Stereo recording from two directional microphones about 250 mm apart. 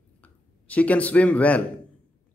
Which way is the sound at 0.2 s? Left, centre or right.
Centre.